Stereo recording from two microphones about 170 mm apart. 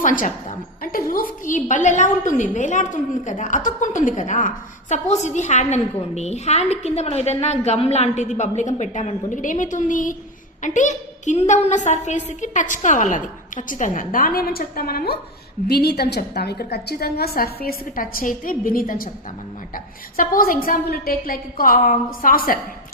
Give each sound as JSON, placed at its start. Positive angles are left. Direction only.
{"t": 0.0, "sound": "a woman's voice", "side_deg": 50}